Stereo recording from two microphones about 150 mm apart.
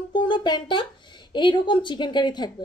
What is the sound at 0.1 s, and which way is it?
A woman's voice, 30° left (ahead or behind).